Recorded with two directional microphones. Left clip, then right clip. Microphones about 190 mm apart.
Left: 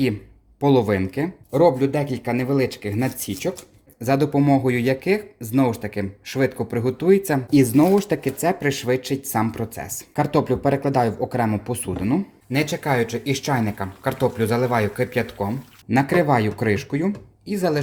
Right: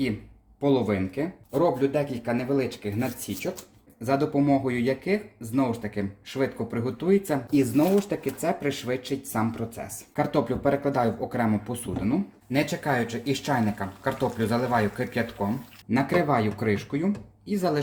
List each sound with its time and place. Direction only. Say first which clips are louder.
0.6 s speech: left 6 dB; 55° left (ahead or behind)